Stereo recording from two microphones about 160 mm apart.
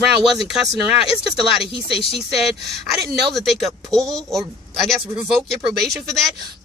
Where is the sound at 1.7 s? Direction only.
35° left (ahead or behind).